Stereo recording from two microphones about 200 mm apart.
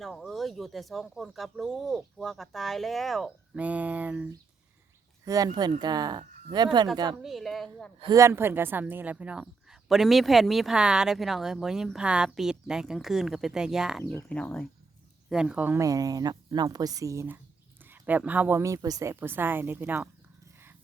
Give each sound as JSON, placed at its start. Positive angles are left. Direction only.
{"t": 0.0, "sound": "a woman's voice", "side_deg": 0}
{"t": 5.2, "sound": "speech", "side_deg": -15}
{"t": 7.2, "sound": "a woman's voice", "side_deg": 0}
{"t": 7.9, "sound": "a woman's voice", "side_deg": -20}